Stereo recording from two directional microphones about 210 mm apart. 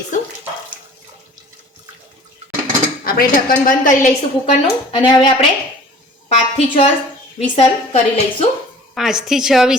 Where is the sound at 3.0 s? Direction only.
45° left (ahead or behind).